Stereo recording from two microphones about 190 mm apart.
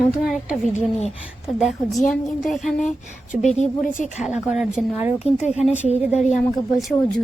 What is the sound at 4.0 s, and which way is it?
Speech, 40° left (ahead or behind).